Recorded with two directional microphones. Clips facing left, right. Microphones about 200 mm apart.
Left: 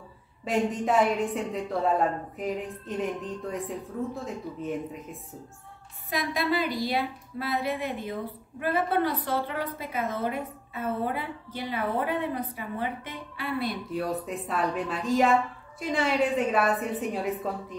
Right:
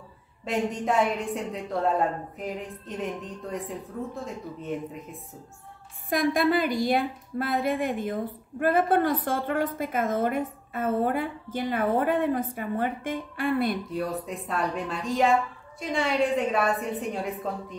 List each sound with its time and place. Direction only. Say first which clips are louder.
0.5 s a woman's voice: left 1 dB; centre (ahead or behind)
6.0 s a woman's voice: right 5 dB; 50° right (ahead or behind)
13.9 s a woman's voice: even; centre (ahead or behind)